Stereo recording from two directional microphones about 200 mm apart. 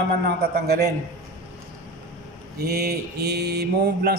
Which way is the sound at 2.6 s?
50° right (ahead or behind).